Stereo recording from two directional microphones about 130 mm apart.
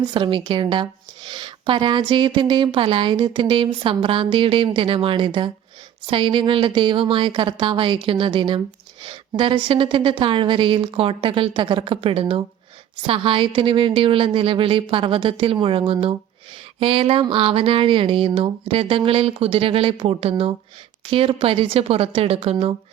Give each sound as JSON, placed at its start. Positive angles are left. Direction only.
{"t": 0.0, "sound": "a woman's voice", "side_deg": -40}